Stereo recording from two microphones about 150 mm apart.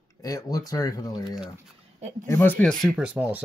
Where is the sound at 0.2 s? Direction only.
25° left (ahead or behind).